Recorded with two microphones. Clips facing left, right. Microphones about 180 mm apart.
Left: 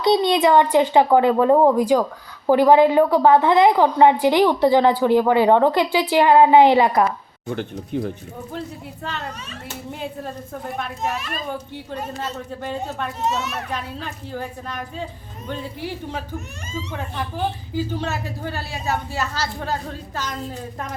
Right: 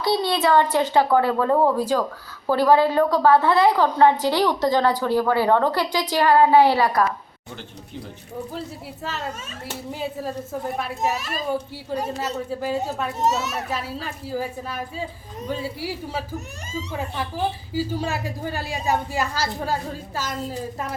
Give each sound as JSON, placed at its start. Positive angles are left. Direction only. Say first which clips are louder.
{"t": 0.0, "sound": "a woman's voice", "louder": "left 5 dB", "side_deg": 20}
{"t": 7.5, "sound": "speech", "louder": "left 11 dB", "side_deg": 55}
{"t": 9.9, "sound": "a child's voice", "louder": "right 2 dB", "side_deg": -5}
{"t": 12.5, "sound": "a child's voice", "louder": "right 3 dB", "side_deg": -5}
{"t": 13.2, "sound": "a child's voice", "louder": "right 2 dB", "side_deg": -40}
{"t": 13.5, "sound": "a child's voice", "louder": "right 1 dB", "side_deg": -5}